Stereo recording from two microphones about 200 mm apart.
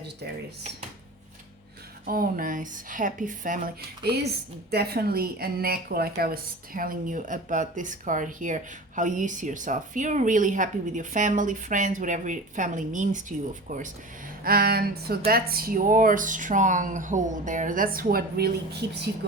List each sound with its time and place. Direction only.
2.0 s a woman's voice: 45° right (ahead or behind)